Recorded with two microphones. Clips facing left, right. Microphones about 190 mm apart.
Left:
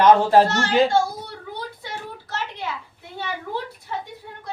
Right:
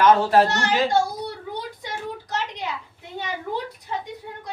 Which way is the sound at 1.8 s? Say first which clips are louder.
Right 3 dB; 15° right (ahead or behind).